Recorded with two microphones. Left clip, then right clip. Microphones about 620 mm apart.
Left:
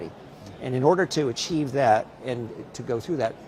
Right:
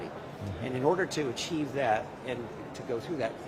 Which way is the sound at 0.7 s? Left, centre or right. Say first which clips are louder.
Left 7 dB; left.